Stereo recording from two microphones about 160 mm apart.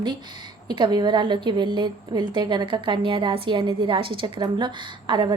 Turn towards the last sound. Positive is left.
turn(degrees=-30)  # may be behind; listen again after turning